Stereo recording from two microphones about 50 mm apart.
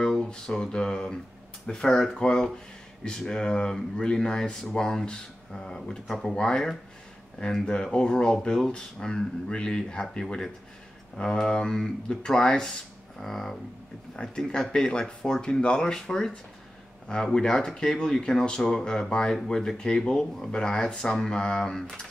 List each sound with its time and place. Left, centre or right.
0.0 s speech: centre
11.1 s speech: centre
14.1 s speech: centre